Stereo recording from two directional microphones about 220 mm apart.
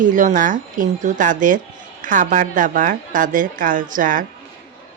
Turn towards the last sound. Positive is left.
turn(degrees=-40)  # may be behind; listen again after turning